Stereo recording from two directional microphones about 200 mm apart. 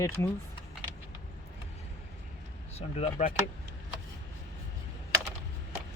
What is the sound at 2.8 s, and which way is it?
Speech, 30° left (ahead or behind).